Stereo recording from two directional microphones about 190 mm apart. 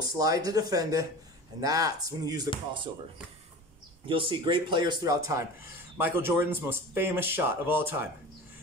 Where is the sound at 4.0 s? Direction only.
25° right (ahead or behind).